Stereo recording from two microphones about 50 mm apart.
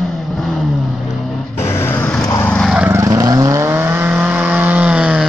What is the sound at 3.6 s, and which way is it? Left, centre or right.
Vehicle, right.